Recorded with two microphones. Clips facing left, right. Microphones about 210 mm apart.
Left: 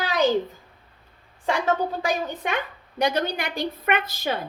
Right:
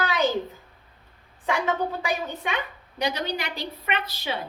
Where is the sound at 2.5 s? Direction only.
50° left (ahead or behind).